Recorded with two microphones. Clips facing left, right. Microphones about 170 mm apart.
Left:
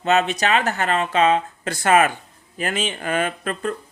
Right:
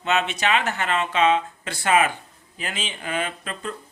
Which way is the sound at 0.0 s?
40° left (ahead or behind).